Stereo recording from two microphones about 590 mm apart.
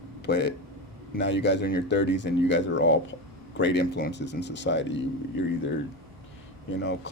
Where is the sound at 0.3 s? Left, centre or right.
Centre.